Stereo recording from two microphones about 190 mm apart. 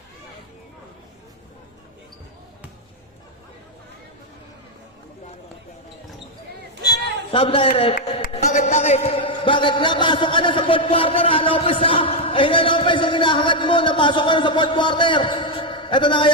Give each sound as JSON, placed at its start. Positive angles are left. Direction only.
{"t": 7.3, "sound": "a man's voice", "side_deg": 25}